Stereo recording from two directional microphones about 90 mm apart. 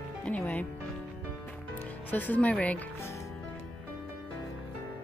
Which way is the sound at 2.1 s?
20° left (ahead or behind).